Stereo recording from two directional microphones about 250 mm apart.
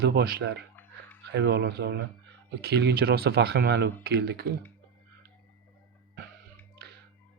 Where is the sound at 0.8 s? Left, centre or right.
Centre.